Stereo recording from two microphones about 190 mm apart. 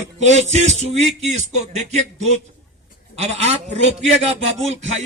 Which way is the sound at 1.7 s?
35° right (ahead or behind).